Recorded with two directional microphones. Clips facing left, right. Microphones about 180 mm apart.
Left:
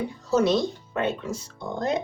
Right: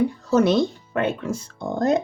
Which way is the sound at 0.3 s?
55° right (ahead or behind).